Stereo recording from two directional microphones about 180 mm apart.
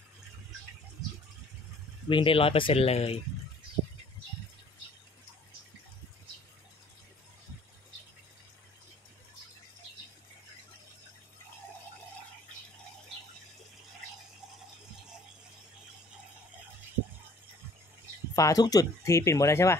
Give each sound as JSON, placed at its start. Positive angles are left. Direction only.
{"t": 2.0, "sound": "speech", "side_deg": 30}
{"t": 18.3, "sound": "speech", "side_deg": 20}